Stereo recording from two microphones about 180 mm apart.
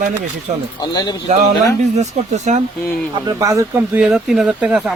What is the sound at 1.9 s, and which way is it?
Speech, 40° right (ahead or behind).